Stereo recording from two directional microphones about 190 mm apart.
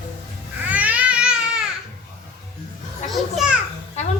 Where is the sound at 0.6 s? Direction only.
10° right (ahead or behind).